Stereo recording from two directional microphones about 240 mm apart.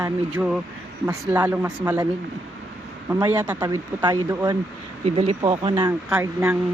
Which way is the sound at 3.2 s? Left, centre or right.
Centre.